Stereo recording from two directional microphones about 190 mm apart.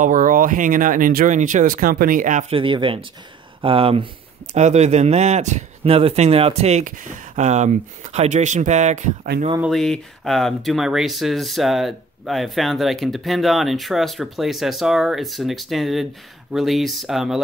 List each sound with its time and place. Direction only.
0.0 s speech: 45° right (ahead or behind)
2.5 s speech: 25° right (ahead or behind)
9.6 s speech: centre (ahead or behind)